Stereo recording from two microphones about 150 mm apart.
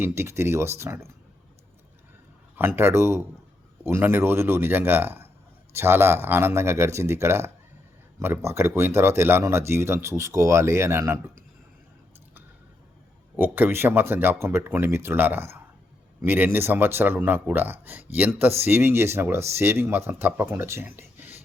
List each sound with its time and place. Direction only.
0.0 s speech: 15° right (ahead or behind)
2.6 s speech: 15° right (ahead or behind)
13.3 s speech: 10° right (ahead or behind)